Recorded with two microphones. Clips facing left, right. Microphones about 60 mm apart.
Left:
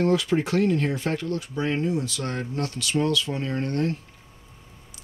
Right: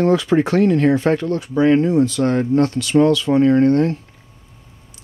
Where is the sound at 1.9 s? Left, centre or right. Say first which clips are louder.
Right 11 dB; right.